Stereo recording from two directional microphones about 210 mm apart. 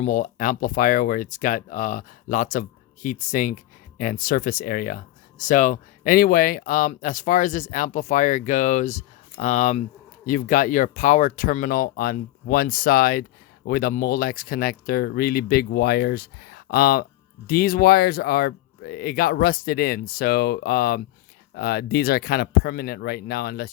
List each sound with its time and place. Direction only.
0.0 s speech: 40° left (ahead or behind)